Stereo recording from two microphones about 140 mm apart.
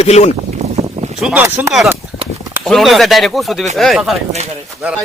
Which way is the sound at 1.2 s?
5° right (ahead or behind).